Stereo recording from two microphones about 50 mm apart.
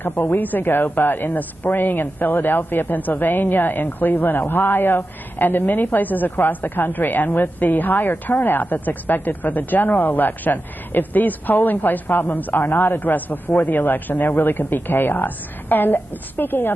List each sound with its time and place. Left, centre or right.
0.0 s a man's voice: left